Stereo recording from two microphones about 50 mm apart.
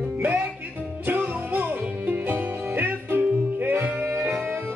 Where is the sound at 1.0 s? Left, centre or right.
Right.